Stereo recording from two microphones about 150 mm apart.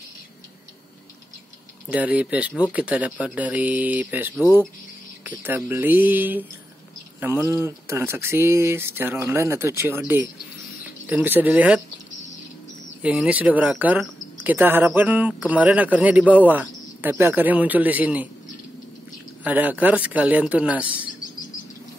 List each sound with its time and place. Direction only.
1.9 s speech: 10° right (ahead or behind)
7.4 s speech: 20° right (ahead or behind)
13.0 s speech: 10° right (ahead or behind)
19.4 s speech: 10° right (ahead or behind)